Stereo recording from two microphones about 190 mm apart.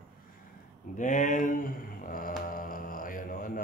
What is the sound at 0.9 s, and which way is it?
Speech, 40° left (ahead or behind).